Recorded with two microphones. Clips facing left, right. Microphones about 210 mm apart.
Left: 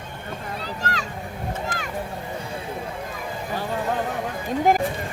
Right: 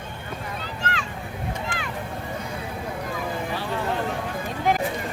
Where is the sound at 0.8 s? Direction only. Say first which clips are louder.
Even; 40° left (ahead or behind).